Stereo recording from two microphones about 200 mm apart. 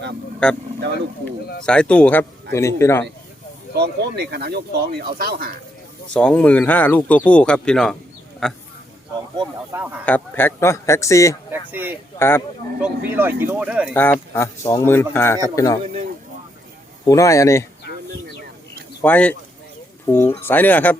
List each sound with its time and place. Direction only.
0.4 s speech: 5° left (ahead or behind)
1.6 s speech: 5° left (ahead or behind)
3.8 s speech: 55° right (ahead or behind)
6.1 s speech: 5° left (ahead or behind)
9.7 s speech: 10° right (ahead or behind)
10.1 s speech: 10° left (ahead or behind)
11.7 s speech: 10° right (ahead or behind)
12.2 s speech: 15° left (ahead or behind)
12.8 s speech: 10° right (ahead or behind)
13.9 s speech: 10° left (ahead or behind)
15.8 s a man's voice: 35° right (ahead or behind)
17.1 s speech: 15° left (ahead or behind)
19.0 s speech: 10° left (ahead or behind)